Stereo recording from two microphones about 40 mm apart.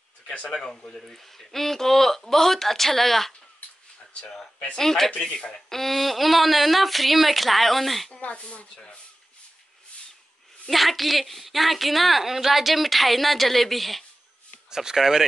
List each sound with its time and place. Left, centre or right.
0.3 s speech: left
0.7 s speech: centre
4.7 s speech: centre
5.3 s speech: left
5.7 s a woman's voice: centre
8.2 s speech: left
10.7 s a woman's voice: centre
14.7 s speech: centre